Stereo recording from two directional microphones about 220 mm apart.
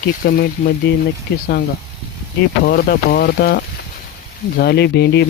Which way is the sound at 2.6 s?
45° left (ahead or behind).